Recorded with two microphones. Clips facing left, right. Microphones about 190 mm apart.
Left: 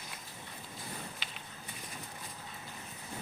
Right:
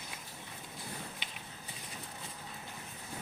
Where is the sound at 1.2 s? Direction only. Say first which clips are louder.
Even; 15° right (ahead or behind).